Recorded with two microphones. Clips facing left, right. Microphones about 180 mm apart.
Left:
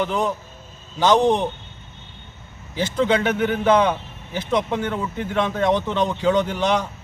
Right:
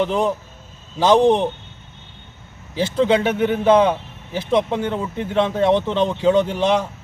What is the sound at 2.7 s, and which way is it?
A man's voice, 30° right (ahead or behind).